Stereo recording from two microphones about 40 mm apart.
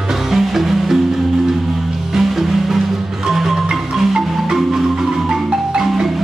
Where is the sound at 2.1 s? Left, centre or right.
Centre.